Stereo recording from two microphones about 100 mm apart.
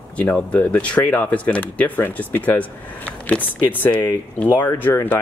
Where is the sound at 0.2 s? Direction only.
15° left (ahead or behind).